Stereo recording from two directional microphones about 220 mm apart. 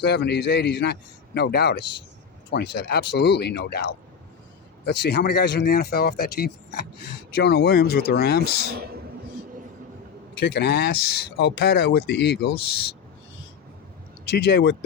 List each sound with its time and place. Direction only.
0.0 s speech: 50° left (ahead or behind)
8.7 s speech: 45° right (ahead or behind)
10.4 s speech: 50° left (ahead or behind)
14.3 s speech: 50° left (ahead or behind)